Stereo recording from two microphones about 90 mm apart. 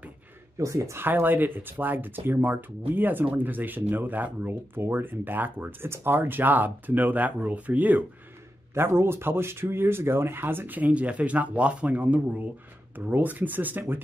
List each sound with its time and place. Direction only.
0.6 s speech: 35° right (ahead or behind)